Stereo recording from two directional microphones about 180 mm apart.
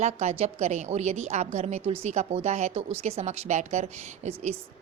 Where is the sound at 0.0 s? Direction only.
35° right (ahead or behind).